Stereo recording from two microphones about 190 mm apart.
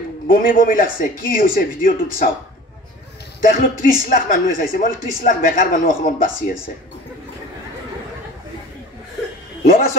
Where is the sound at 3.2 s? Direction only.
60° left (ahead or behind).